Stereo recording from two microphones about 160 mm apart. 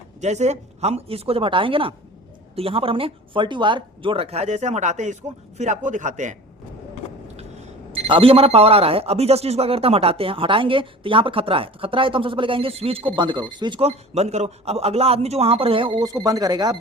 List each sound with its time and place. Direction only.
0.2 s a man's voice: 45° right (ahead or behind)
8.0 s speech: 35° right (ahead or behind)